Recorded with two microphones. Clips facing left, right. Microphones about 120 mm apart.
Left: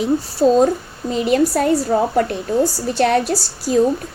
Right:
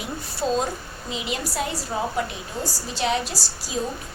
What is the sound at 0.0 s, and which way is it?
A woman's voice, 40° left (ahead or behind).